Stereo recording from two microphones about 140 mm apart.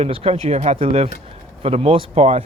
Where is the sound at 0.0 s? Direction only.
45° right (ahead or behind).